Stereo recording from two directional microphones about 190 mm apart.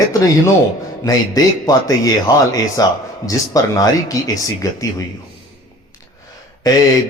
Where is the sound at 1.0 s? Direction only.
20° left (ahead or behind).